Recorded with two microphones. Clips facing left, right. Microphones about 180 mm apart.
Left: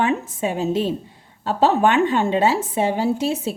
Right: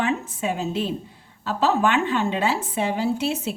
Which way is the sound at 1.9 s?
40° left (ahead or behind).